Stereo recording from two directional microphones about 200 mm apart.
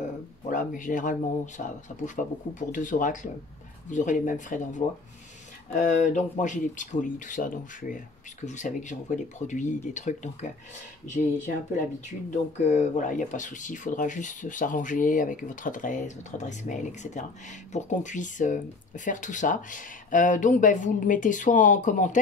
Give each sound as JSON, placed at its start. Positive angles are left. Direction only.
{"t": 0.5, "sound": "speech", "side_deg": 40}